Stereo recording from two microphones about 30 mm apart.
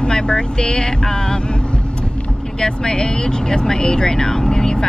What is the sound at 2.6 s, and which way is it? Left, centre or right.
Speech, left.